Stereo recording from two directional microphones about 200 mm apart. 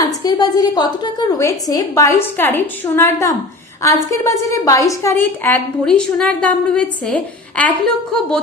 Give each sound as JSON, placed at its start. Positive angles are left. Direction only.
{"t": 0.0, "sound": "a woman's voice", "side_deg": 20}